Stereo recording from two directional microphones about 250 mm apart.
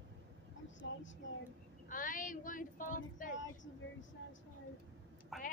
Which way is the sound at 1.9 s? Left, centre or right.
Left.